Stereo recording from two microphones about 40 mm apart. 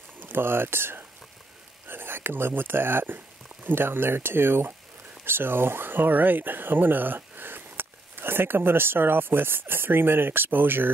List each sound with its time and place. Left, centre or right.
0.3 s speech: right
1.9 s speech: right